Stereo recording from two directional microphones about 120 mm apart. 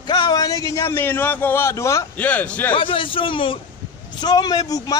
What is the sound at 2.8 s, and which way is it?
Speech, 45° left (ahead or behind).